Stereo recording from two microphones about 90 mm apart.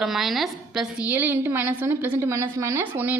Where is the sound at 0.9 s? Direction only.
20° right (ahead or behind).